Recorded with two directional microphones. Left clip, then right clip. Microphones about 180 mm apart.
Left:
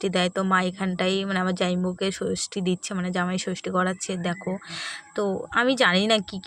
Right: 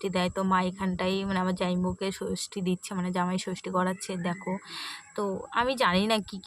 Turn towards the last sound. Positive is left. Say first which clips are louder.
# left 5 dB
turn(degrees=30)  # may be behind; listen again after turning